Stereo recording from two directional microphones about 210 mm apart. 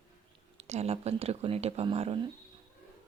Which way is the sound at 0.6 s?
30° right (ahead or behind).